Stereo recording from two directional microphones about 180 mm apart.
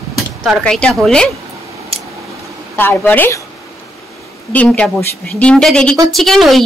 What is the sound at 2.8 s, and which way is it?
Speech, 10° left (ahead or behind).